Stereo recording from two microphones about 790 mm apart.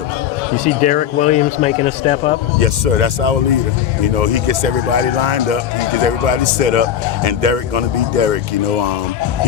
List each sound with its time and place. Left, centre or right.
0.6 s speech: centre
2.6 s speech: right